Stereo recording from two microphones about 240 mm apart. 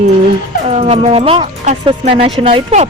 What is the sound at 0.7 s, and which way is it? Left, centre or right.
Speech, right.